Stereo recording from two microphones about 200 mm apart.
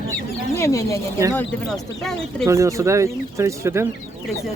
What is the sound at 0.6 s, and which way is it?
Speech, 15° left (ahead or behind).